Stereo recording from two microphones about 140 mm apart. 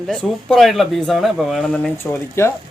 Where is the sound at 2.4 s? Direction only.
20° left (ahead or behind).